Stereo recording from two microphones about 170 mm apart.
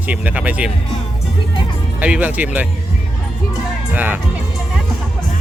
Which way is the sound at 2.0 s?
10° right (ahead or behind).